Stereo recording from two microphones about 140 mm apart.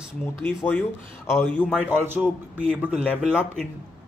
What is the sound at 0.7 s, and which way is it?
Speech, 15° left (ahead or behind).